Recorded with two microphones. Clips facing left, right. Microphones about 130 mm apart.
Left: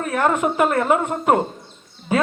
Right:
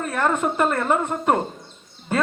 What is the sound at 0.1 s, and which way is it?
A man's voice, 10° left (ahead or behind).